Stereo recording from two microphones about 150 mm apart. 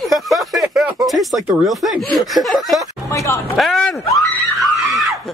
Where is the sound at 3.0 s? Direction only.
20° left (ahead or behind).